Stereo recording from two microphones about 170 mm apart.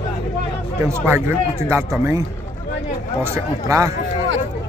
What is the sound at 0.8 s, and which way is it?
Speech, 15° right (ahead or behind).